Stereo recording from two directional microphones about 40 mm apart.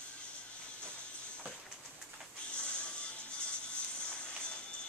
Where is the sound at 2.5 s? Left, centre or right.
Left.